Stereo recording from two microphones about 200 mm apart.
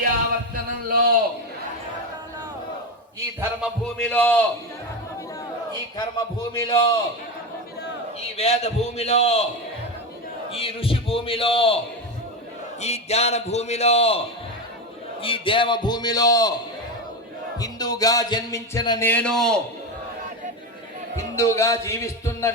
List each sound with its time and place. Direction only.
0.9 s a sound: 45° right (ahead or behind)
3.6 s speech: 5° left (ahead or behind)
6.6 s a man's voice: 20° left (ahead or behind)
8.4 s a man's voice: 30° left (ahead or behind)
10.5 s a man's voice: 25° left (ahead or behind)
12.8 s a man's voice: 30° left (ahead or behind)
15.2 s a man's voice: 25° left (ahead or behind)
17.6 s speech: 20° left (ahead or behind); by 19.5 s 5° left (ahead or behind)
21.3 s speech: 15° left (ahead or behind)